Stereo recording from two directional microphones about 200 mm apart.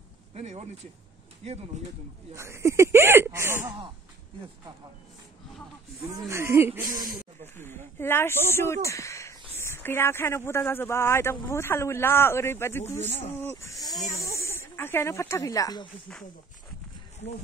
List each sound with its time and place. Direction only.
0.3 s a man's voice: 30° right (ahead or behind)
2.3 s speech: 15° right (ahead or behind)
6.0 s speech: 15° right (ahead or behind)
7.5 s speech: 10° left (ahead or behind)